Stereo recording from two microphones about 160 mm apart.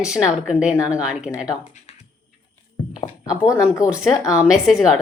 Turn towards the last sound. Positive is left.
turn(degrees=-5)  # may be behind; listen again after turning